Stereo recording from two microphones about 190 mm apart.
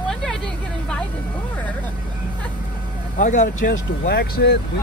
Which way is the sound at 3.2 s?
40° left (ahead or behind).